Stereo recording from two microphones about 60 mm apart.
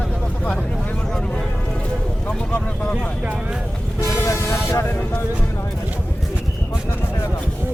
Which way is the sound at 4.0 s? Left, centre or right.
Left.